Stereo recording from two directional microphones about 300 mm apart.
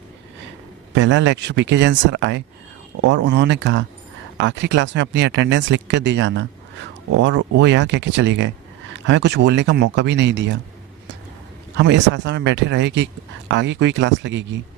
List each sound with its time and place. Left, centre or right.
0.9 s speech: right
11.8 s speech: right